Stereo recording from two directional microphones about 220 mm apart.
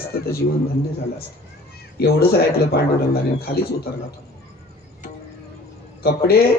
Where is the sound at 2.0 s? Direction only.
45° left (ahead or behind).